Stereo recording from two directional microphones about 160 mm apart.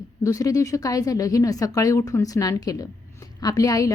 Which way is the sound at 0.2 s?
20° left (ahead or behind).